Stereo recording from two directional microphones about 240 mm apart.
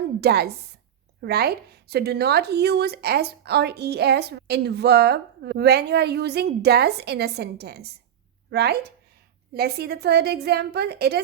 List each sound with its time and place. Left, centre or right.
0.2 s a woman's voice: right